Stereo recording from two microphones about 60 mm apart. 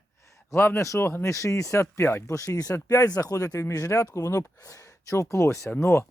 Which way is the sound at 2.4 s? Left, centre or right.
Left.